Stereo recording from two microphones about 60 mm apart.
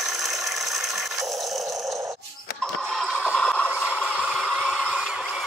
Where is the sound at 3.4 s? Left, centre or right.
Left.